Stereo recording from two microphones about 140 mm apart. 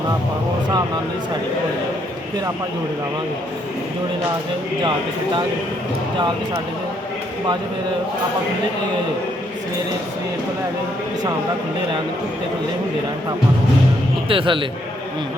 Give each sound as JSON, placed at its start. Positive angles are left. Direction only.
{"t": 14.3, "sound": "a man's voice", "side_deg": -40}